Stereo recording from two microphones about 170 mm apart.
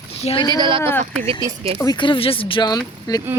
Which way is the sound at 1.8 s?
25° left (ahead or behind).